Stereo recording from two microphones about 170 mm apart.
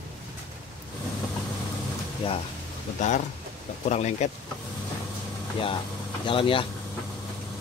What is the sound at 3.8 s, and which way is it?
Speech, 45° left (ahead or behind).